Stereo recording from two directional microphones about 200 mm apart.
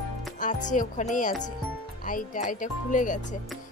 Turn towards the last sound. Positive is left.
turn(degrees=40)  # may be behind; listen again after turning